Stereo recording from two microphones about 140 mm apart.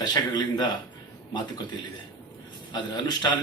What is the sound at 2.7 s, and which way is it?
Speech, 30° left (ahead or behind).